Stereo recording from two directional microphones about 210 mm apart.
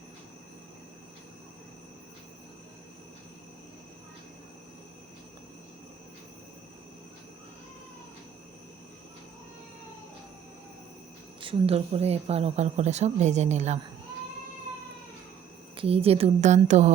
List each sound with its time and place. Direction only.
11.3 s speech: 25° right (ahead or behind)
15.7 s a woman's voice: 25° right (ahead or behind)